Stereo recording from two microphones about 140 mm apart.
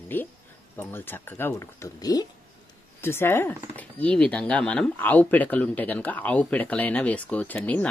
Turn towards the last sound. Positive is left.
turn(degrees=10)  # may be behind; listen again after turning